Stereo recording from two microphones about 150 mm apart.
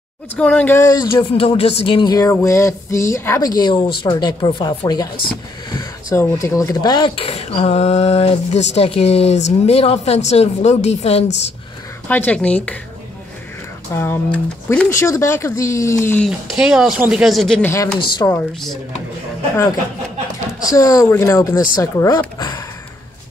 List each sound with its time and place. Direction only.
0.4 s speech: 10° left (ahead or behind)
1.3 s speech: 40° left (ahead or behind)
12.1 s speech: 10° left (ahead or behind)
13.9 s speech: 15° left (ahead or behind)
14.9 s speech: 20° left (ahead or behind)
16.3 s speech: centre (ahead or behind)
17.6 s speech: 15° left (ahead or behind)
20.6 s speech: 20° left (ahead or behind)